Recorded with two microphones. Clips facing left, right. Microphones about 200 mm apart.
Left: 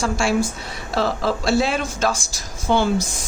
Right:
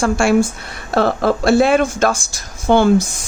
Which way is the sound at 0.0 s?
50° right (ahead or behind).